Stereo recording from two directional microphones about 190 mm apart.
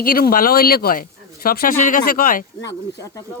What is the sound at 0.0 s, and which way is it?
Speech, 50° left (ahead or behind).